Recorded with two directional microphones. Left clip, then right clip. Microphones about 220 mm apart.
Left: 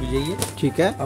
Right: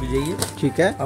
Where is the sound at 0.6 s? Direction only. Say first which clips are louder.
Right 1 dB; centre (ahead or behind).